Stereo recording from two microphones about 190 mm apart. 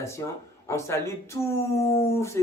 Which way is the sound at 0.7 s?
15° left (ahead or behind).